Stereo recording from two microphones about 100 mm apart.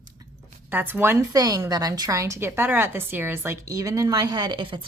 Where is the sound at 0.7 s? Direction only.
20° right (ahead or behind).